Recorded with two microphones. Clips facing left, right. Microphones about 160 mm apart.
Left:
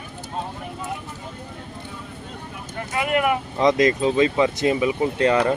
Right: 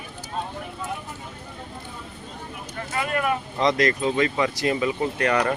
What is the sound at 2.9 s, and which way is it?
Speech, 15° left (ahead or behind).